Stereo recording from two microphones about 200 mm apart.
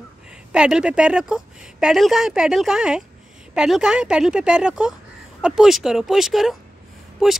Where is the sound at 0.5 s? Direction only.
5° right (ahead or behind).